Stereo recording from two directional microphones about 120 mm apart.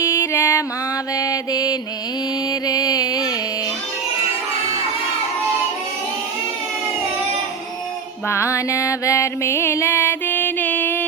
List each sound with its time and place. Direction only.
0.0 s music: 20° left (ahead or behind)
1.1 s mantra: 30° left (ahead or behind)
2.5 s music: 30° left (ahead or behind)
8.3 s music: 25° left (ahead or behind)